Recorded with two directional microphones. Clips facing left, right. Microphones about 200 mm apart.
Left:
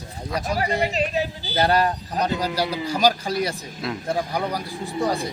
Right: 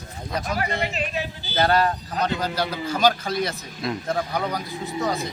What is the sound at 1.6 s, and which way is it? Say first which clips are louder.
A man's voice: even; 10° left (ahead or behind).